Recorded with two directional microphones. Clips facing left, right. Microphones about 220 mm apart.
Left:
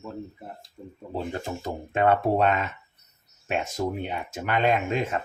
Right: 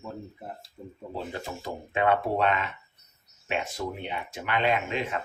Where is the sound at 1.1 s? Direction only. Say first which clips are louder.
Left 5 dB; 45° left (ahead or behind).